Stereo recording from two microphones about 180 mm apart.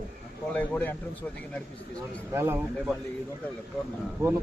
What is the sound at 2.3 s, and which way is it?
Speech, 15° right (ahead or behind).